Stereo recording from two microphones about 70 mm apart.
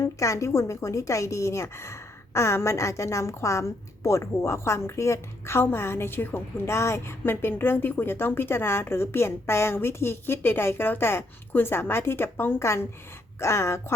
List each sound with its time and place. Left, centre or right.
0.0 s a woman's voice: left
12.6 s a woman's voice: left